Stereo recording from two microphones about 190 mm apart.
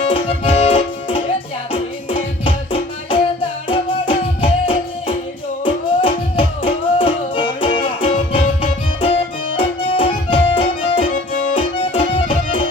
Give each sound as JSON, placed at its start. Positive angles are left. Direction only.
{"t": 0.1, "sound": "music", "side_deg": 25}